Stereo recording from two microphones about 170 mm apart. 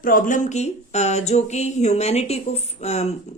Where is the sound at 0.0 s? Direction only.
50° left (ahead or behind).